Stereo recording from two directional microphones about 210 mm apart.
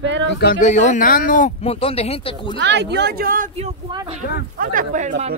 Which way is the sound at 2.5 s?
55° right (ahead or behind).